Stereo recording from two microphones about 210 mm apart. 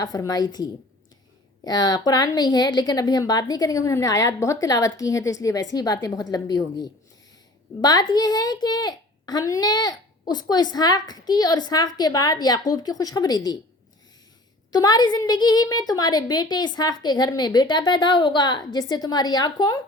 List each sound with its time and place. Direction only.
0.0 s a woman's voice: 15° left (ahead or behind)
14.7 s a woman's voice: 20° left (ahead or behind)